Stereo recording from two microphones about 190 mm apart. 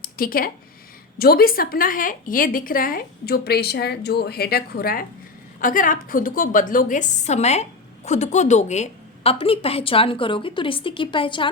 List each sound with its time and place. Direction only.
0.2 s a woman's voice: 50° left (ahead or behind); by 11.4 s 25° left (ahead or behind)